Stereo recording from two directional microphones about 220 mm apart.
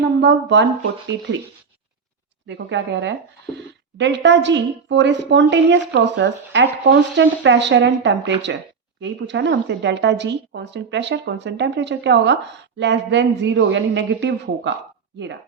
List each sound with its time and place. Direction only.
0.2 s a woman's voice: 55° right (ahead or behind)
2.5 s a woman's voice: 55° right (ahead or behind)